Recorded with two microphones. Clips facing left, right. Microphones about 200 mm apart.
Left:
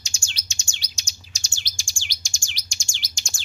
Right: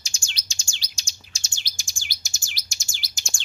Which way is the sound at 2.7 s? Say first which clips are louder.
Left 1 dB; 5° right (ahead or behind).